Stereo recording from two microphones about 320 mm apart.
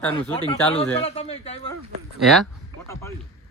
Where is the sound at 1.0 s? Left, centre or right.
Centre.